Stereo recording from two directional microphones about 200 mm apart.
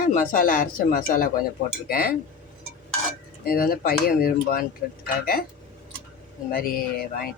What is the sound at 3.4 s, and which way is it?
Speech, 45° left (ahead or behind).